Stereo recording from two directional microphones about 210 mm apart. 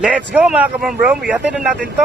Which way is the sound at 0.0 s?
5° right (ahead or behind).